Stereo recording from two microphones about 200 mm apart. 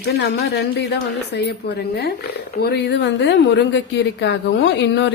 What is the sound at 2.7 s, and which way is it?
Speech, 60° left (ahead or behind).